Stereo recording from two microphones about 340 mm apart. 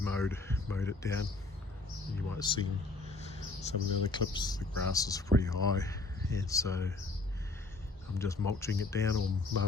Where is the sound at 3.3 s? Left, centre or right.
Centre.